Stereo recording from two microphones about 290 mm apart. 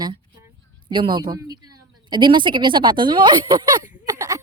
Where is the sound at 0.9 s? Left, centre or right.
Centre.